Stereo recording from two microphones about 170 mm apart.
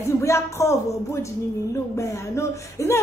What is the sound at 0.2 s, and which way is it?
A woman's voice, 15° left (ahead or behind).